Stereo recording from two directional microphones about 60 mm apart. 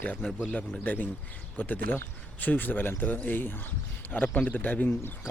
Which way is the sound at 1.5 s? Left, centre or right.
Left.